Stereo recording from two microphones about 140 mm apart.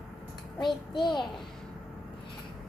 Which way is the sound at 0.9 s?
35° left (ahead or behind).